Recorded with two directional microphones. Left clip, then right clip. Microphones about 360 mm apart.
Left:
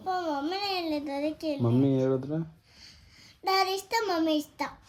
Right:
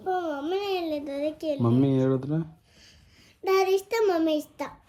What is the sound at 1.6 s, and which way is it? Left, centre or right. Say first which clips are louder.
Speech: right 2 dB; centre.